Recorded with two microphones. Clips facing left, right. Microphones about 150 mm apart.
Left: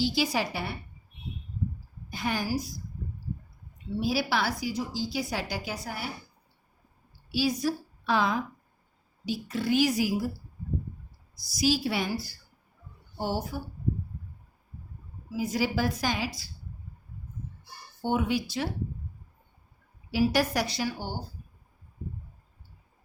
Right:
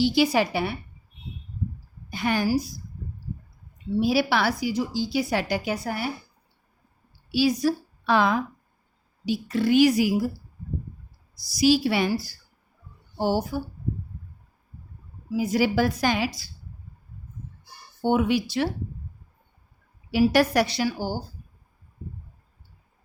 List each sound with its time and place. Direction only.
0.0 s a woman's voice: 65° right (ahead or behind)
2.0 s a woman's voice: 70° right (ahead or behind)
4.0 s a woman's voice: 65° right (ahead or behind)
7.3 s a woman's voice: 75° right (ahead or behind)
11.5 s a woman's voice: 75° right (ahead or behind); by 13.6 s 90° right
15.4 s a woman's voice: 75° right (ahead or behind)
18.0 s a woman's voice: 80° right
20.1 s a woman's voice: 70° right (ahead or behind); by 21.2 s 90° right